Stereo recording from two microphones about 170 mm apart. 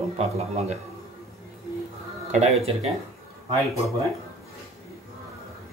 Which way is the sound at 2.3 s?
40° right (ahead or behind).